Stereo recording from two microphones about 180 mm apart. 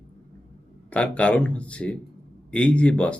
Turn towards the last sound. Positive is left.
turn(degrees=5)  # may be behind; listen again after turning